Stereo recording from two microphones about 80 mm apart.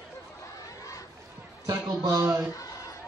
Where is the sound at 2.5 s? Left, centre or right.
Left.